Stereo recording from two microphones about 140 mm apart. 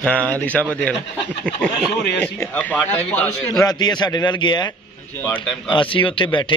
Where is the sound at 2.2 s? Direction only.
10° left (ahead or behind).